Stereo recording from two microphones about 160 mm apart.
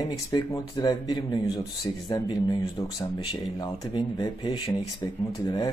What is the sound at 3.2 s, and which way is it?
Speech, 30° left (ahead or behind).